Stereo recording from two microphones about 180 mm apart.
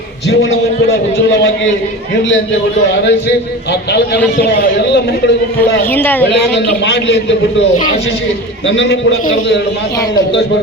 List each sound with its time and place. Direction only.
2.9 s a man's voice: 75° left (ahead or behind)
5.9 s a woman's voice: 10° left (ahead or behind)
6.8 s a man's voice: 80° left
8.6 s a man's voice: 85° left